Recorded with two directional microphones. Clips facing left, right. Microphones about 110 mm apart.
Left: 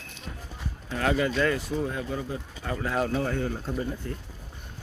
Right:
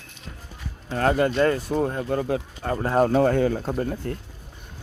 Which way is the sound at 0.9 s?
40° right (ahead or behind).